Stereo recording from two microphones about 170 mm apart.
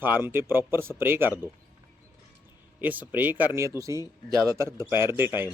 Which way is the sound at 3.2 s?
10° right (ahead or behind).